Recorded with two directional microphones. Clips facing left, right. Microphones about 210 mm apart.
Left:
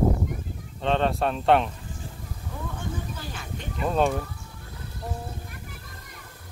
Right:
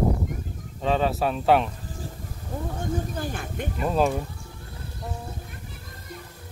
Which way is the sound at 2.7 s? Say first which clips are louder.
Right 8 dB; 50° right (ahead or behind).